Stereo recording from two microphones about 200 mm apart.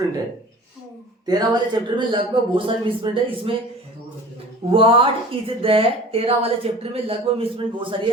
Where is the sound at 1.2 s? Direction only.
20° right (ahead or behind).